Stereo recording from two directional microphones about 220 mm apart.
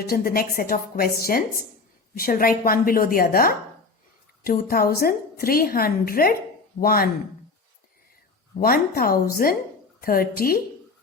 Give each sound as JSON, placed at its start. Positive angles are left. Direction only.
{"t": 0.1, "sound": "a woman's voice", "side_deg": 40}
{"t": 8.6, "sound": "a woman's voice", "side_deg": 45}